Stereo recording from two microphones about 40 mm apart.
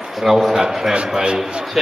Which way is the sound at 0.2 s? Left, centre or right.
Centre.